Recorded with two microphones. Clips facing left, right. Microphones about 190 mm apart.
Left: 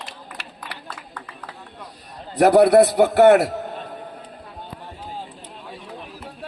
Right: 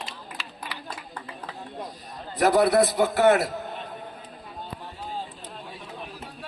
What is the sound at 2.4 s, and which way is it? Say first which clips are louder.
A man's voice: left 7 dB; 70° left (ahead or behind).